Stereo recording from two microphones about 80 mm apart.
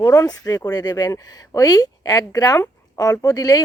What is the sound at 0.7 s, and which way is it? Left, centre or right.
Speech, left.